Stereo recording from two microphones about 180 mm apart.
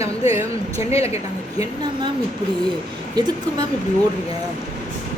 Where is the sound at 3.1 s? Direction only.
25° right (ahead or behind).